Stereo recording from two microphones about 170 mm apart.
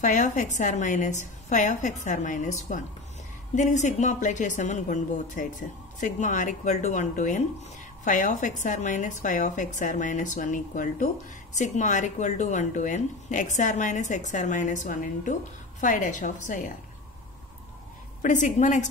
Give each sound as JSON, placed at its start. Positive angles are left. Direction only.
{"t": 0.0, "sound": "speech", "side_deg": 45}
{"t": 18.2, "sound": "speech", "side_deg": 45}